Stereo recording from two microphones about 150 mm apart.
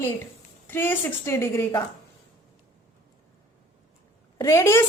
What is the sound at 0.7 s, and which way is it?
A woman's voice, 15° left (ahead or behind).